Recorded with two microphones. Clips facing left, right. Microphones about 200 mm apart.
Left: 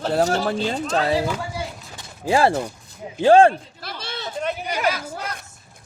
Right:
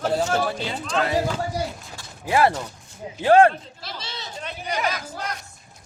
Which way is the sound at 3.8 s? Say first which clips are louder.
Left 3 dB; 55° left (ahead or behind).